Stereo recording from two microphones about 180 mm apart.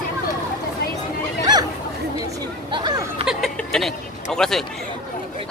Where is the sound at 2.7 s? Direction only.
25° right (ahead or behind).